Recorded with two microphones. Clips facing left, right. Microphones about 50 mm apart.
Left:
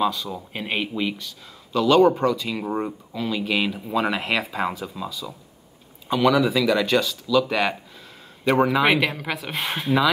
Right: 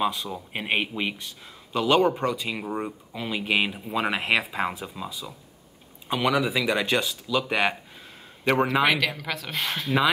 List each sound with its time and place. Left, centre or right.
0.0 s speech: centre
2.6 s speech: centre
3.2 s speech: centre
8.5 s speech: centre
8.8 s speech: centre